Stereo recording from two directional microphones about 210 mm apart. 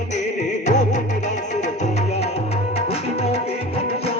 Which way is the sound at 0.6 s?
35° left (ahead or behind).